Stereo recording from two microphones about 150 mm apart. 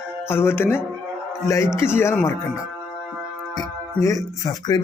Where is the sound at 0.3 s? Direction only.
15° left (ahead or behind).